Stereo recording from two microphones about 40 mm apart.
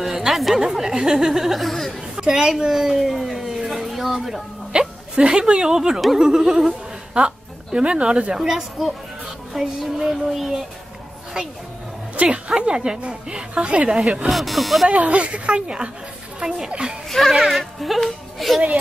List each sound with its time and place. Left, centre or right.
0.3 s speech: centre
2.1 s a woman's voice: centre
2.6 s a sound: centre
4.7 s speech: right
8.4 s speech: centre
12.2 s speech: right
13.8 s speech: centre
14.3 s speech: centre
14.9 s speech: right
17.1 s speech: centre